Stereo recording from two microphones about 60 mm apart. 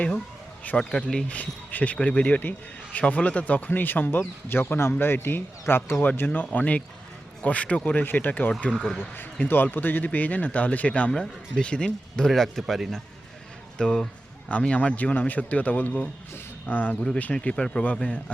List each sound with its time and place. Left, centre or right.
0.8 s a man's voice: centre
1.3 s a man's voice: left
8.7 s a man's voice: centre
9.4 s a man's voice: left; by 12.3 s centre
12.3 s a man's voice: centre
13.7 s a man's voice: centre; by 17.0 s left
17.3 s a man's voice: centre